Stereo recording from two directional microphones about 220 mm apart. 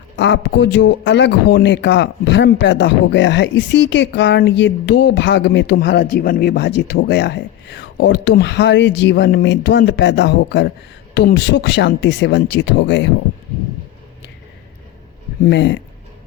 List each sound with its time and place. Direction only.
0.2 s speech: 55° left (ahead or behind)
15.4 s speech: 55° left (ahead or behind)